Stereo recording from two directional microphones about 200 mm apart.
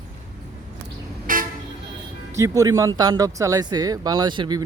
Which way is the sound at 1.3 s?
45° right (ahead or behind).